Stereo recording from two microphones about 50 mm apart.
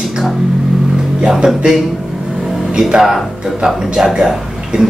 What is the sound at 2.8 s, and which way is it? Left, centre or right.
A man's voice, centre.